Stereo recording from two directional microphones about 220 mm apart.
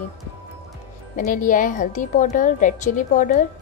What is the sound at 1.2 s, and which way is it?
A woman's voice, 40° left (ahead or behind).